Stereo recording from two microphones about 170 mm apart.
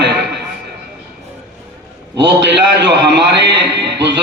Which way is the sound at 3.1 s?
90° right.